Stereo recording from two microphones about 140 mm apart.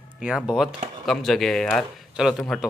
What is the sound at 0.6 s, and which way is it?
Speech, centre (ahead or behind).